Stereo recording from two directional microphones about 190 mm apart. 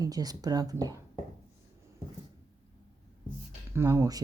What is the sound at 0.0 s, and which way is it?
Speech, 20° right (ahead or behind).